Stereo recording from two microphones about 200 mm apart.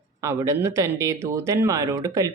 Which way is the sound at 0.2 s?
15° right (ahead or behind).